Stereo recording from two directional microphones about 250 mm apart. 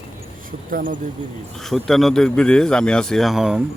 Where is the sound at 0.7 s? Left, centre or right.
Right.